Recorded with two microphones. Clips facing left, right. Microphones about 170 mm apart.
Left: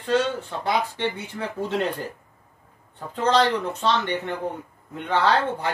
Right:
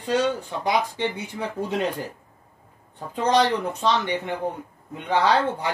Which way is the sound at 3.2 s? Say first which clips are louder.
Even; 15° right (ahead or behind).